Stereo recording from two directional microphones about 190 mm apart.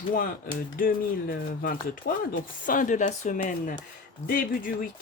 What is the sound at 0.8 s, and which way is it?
Speech, 50° left (ahead or behind).